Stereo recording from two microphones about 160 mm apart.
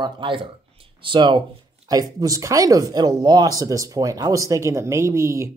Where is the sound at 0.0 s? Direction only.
30° right (ahead or behind).